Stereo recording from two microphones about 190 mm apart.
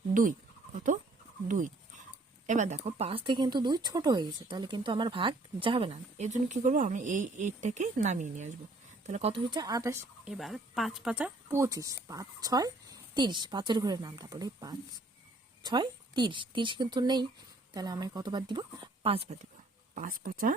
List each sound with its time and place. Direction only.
0.1 s goat: 45° right (ahead or behind)
1.5 s speech: 40° right (ahead or behind); by 10.0 s 15° right (ahead or behind)
10.2 s speech: centre (ahead or behind); by 19.5 s 35° right (ahead or behind)
20.0 s speech: 50° right (ahead or behind)